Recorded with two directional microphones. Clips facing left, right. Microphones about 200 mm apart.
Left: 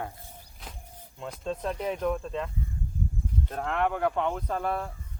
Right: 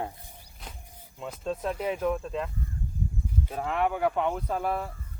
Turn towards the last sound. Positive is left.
turn(degrees=-5)  # may be behind; listen again after turning